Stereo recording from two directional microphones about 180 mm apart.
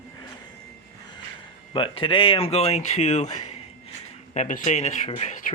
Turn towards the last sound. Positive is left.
turn(degrees=40)  # may be behind; listen again after turning